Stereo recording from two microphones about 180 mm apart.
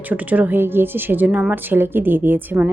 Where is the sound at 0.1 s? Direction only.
10° right (ahead or behind).